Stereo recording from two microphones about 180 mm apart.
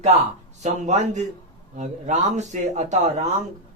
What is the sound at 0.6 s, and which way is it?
A man's voice, 40° right (ahead or behind).